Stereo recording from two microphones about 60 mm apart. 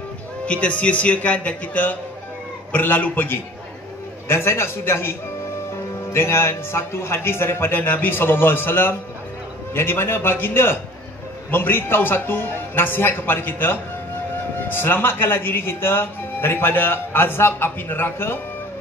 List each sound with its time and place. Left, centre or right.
0.5 s a man's voice: left
4.3 s a man's voice: left
6.1 s speech: left